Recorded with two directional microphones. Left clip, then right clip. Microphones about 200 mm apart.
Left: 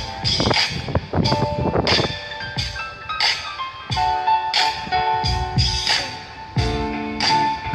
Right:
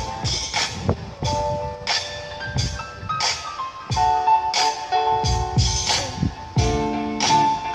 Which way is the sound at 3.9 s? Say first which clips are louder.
Right 1 dB; 25° left (ahead or behind).